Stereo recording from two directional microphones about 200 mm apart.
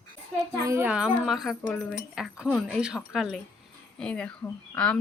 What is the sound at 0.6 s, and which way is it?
Speech, 10° right (ahead or behind).